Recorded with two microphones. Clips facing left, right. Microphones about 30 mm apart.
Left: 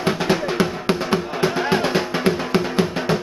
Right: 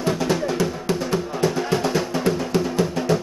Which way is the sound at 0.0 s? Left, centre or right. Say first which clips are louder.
Left 2 dB; left.